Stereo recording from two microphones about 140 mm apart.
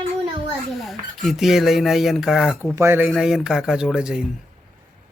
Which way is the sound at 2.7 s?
15° right (ahead or behind).